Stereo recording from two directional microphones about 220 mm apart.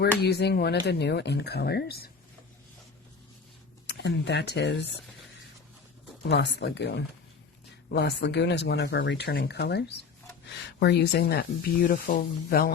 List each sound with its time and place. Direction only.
0.2 s speech: 45° left (ahead or behind)
3.8 s speech: 55° left (ahead or behind)
6.2 s speech: 50° left (ahead or behind)